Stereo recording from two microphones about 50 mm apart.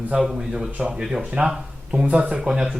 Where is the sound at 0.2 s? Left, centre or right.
Centre.